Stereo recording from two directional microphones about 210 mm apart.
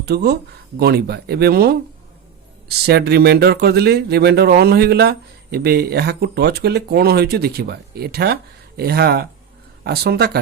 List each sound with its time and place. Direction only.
0.0 s speech: 50° right (ahead or behind)